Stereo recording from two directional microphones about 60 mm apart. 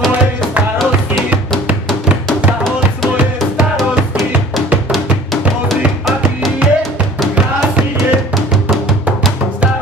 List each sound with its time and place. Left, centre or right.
6.0 s music: centre
7.3 s music: centre